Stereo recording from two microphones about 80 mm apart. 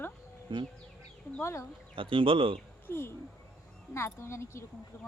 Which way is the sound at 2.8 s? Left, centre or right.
Left.